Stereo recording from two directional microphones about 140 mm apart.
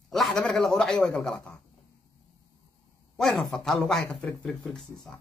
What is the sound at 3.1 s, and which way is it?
Speech, centre (ahead or behind).